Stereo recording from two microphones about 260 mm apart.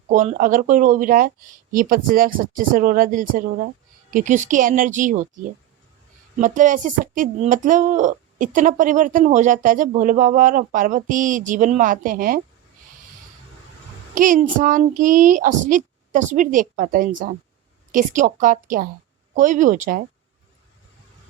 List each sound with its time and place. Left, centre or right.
0.1 s speech: right
14.2 s speech: right